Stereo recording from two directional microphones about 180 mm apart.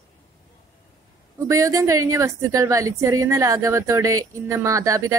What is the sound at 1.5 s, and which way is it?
Speech, 15° right (ahead or behind).